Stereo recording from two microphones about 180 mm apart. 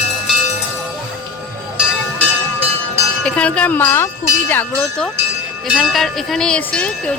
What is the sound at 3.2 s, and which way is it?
Speech, 5° left (ahead or behind).